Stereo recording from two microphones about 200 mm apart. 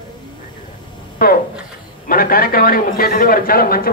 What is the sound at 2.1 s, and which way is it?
A man's voice, 45° left (ahead or behind).